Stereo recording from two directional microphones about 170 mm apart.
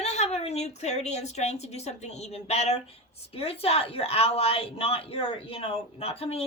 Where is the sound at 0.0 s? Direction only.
40° left (ahead or behind).